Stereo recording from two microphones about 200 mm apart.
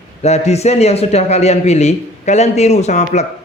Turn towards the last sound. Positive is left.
turn(degrees=35)  # may be behind; listen again after turning